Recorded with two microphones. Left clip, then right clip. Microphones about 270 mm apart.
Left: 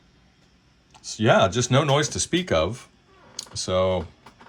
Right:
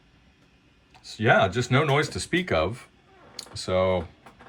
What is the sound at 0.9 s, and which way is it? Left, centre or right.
Speech, centre.